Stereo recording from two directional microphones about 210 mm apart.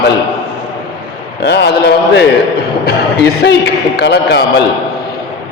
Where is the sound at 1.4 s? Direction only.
55° left (ahead or behind).